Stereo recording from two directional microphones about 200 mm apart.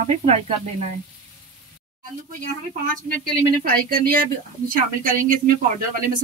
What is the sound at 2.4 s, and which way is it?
Speech, 40° right (ahead or behind).